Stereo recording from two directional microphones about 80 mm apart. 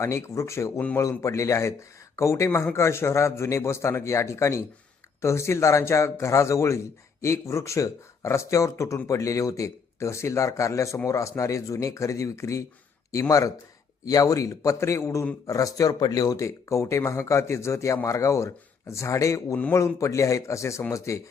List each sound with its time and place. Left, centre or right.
0.0 s speech: left